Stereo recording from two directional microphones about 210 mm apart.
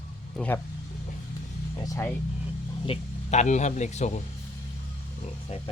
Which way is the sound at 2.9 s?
35° left (ahead or behind).